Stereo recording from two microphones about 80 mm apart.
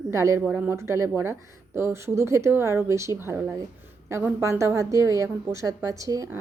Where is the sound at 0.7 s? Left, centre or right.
Right.